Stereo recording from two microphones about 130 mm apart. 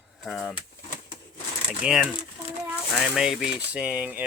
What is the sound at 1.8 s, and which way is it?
Speech, 5° right (ahead or behind).